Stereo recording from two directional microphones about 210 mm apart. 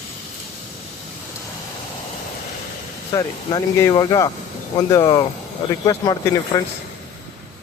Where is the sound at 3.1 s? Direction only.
15° left (ahead or behind).